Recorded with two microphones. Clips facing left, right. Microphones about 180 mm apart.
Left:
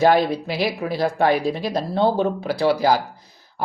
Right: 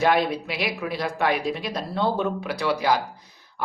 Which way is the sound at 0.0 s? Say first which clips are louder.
Left 4 dB; 30° left (ahead or behind).